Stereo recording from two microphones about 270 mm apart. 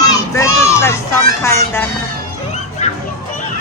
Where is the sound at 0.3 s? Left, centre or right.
Centre.